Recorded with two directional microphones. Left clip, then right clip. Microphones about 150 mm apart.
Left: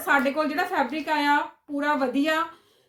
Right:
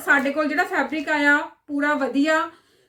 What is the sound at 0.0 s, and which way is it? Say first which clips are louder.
A woman's voice: right 3 dB; 10° right (ahead or behind).